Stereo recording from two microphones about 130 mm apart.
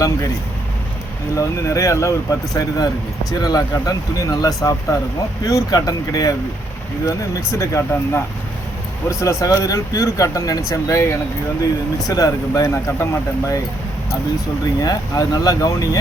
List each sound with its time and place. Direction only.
1.4 s speech: 25° left (ahead or behind)
7.6 s speech: 20° left (ahead or behind)
14.8 s speech: 30° left (ahead or behind)